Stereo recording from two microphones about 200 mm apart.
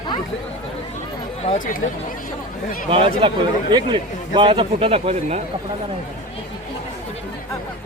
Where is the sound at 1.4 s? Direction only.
35° left (ahead or behind).